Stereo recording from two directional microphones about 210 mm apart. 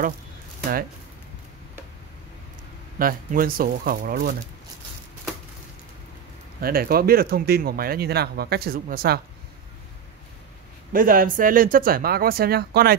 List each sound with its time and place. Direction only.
3.0 s speech: 45° right (ahead or behind)
6.6 s speech: 45° right (ahead or behind)
10.9 s speech: 40° right (ahead or behind)